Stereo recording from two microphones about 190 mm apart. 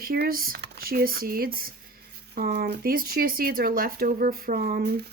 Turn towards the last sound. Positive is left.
turn(degrees=-55)  # may be behind; listen again after turning